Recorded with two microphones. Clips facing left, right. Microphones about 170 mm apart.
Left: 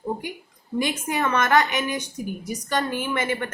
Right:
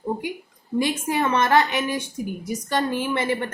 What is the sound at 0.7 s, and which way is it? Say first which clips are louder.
A woman's voice: right 2 dB; 30° right (ahead or behind).